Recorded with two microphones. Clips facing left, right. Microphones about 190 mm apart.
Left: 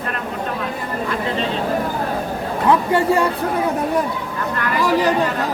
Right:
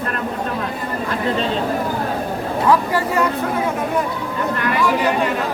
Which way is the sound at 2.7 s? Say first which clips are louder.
Left 2 dB; 30° left (ahead or behind).